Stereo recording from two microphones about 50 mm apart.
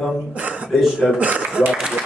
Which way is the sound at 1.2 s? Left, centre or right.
Right.